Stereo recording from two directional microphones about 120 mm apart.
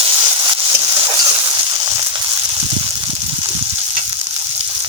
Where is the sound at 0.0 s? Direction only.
35° right (ahead or behind).